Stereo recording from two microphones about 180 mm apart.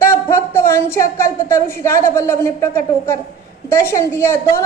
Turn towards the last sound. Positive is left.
turn(degrees=15)  # may be behind; listen again after turning